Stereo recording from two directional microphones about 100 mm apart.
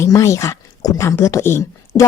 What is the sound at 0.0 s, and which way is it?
Speech, 30° left (ahead or behind).